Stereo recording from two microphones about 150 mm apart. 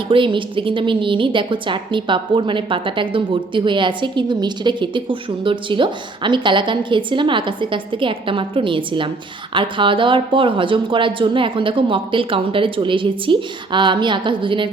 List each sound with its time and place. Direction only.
0.1 s a woman's voice: 35° right (ahead or behind)